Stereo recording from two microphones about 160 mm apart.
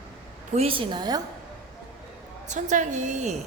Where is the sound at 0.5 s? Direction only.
35° right (ahead or behind).